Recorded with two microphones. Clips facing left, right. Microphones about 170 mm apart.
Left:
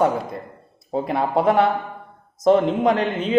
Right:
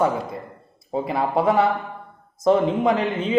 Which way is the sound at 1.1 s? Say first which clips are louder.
Left 1 dB; 25° left (ahead or behind).